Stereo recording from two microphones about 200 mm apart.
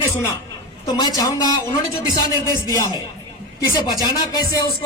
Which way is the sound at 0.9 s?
20° left (ahead or behind).